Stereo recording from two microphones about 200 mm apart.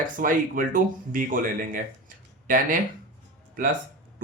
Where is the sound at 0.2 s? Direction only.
45° right (ahead or behind).